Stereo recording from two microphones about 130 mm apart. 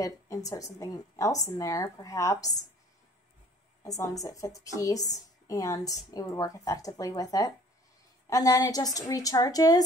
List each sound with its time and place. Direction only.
0.0 s a woman's voice: 25° left (ahead or behind)
3.8 s a woman's voice: 25° left (ahead or behind)